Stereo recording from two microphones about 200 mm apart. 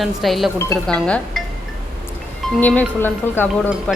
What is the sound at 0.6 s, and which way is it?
Speech, 15° left (ahead or behind).